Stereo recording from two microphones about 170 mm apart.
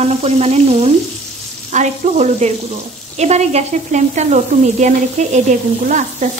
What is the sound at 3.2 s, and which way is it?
Speech, 40° right (ahead or behind).